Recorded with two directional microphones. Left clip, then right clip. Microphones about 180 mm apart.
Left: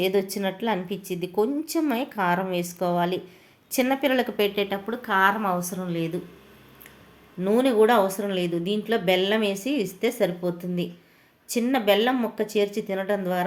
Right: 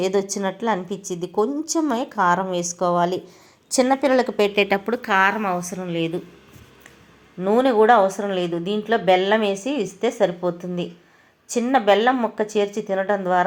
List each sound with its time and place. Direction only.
0.0 s a woman's voice: 5° right (ahead or behind)
4.5 s a woman's voice: 35° right (ahead or behind)
5.4 s a woman's voice: 10° right (ahead or behind)
7.3 s a woman's voice: 10° left (ahead or behind)